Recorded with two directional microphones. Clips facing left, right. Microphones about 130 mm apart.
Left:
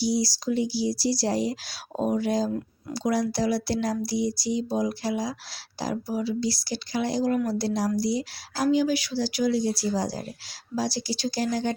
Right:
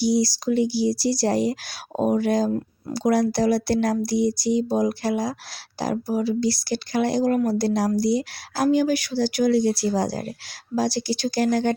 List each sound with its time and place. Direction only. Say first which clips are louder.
0.0 s speech: right 5 dB; 55° right (ahead or behind)